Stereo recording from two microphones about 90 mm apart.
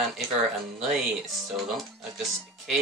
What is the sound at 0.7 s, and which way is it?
Speech, centre (ahead or behind).